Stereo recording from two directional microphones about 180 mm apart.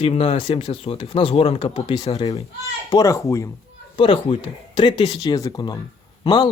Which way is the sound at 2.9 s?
20° left (ahead or behind).